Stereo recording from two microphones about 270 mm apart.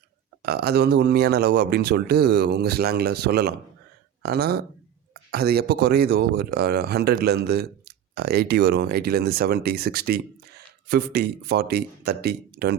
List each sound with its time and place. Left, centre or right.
0.4 s speech: right